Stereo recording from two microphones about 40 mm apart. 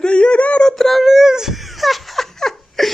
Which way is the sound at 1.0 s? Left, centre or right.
Centre.